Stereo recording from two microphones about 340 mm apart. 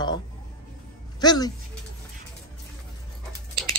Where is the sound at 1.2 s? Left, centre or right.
Centre.